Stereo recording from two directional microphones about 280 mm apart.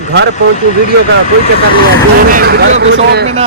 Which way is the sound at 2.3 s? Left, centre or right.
Right.